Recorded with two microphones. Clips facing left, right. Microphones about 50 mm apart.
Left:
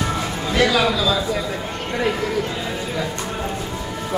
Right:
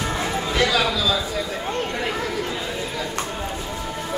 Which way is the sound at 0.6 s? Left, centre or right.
Centre.